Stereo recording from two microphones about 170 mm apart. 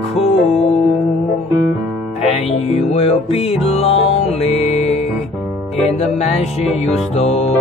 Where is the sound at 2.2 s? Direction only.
40° left (ahead or behind).